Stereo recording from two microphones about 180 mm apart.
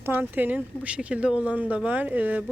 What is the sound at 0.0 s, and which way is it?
Speech, 10° right (ahead or behind).